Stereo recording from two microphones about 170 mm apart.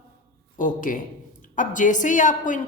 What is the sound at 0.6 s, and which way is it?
A woman's voice, 50° left (ahead or behind).